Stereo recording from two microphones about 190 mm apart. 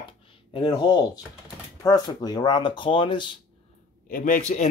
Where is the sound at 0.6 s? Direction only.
25° left (ahead or behind).